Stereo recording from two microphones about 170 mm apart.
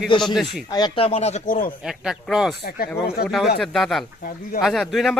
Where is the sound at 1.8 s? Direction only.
Centre (ahead or behind).